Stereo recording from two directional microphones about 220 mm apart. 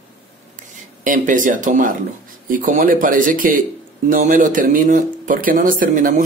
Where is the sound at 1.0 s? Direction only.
35° right (ahead or behind).